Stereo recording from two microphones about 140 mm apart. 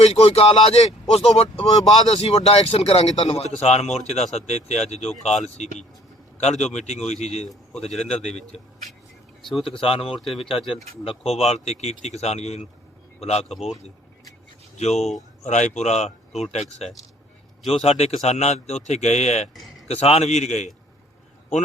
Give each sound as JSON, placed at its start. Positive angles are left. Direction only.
{"t": 0.0, "sound": "a man's voice", "side_deg": 45}
{"t": 6.8, "sound": "a man's voice", "side_deg": 55}
{"t": 7.9, "sound": "a man's voice", "side_deg": 0}
{"t": 8.3, "sound": "a man's voice", "side_deg": 50}
{"t": 9.5, "sound": "a man's voice", "side_deg": 0}
{"t": 9.7, "sound": "speech", "side_deg": 40}
{"t": 10.2, "sound": "a man's voice", "side_deg": 0}
{"t": 11.0, "sound": "a man's voice", "side_deg": 45}
{"t": 13.5, "sound": "a man's voice", "side_deg": 0}
{"t": 14.8, "sound": "a man's voice", "side_deg": 50}
{"t": 19.5, "sound": "a sound", "side_deg": 0}
{"t": 19.9, "sound": "a man's voice", "side_deg": 50}